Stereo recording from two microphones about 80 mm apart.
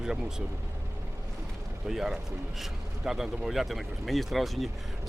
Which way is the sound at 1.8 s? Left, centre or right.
Centre.